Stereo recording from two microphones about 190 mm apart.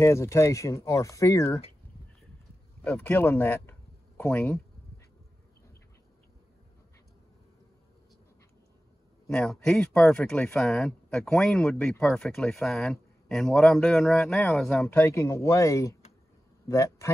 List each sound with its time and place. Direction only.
0.0 s speech: 15° left (ahead or behind)
2.8 s speech: 5° left (ahead or behind)
9.3 s speech: 5° left (ahead or behind)